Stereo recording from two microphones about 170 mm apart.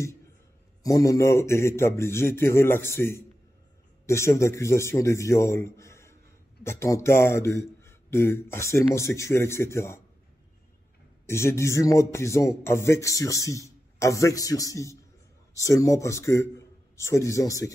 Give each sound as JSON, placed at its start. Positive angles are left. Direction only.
{"t": 0.8, "sound": "a man's voice", "side_deg": 20}
{"t": 11.2, "sound": "a man's voice", "side_deg": 15}